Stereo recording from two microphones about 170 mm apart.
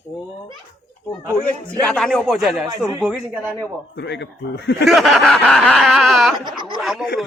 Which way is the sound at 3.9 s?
90° left.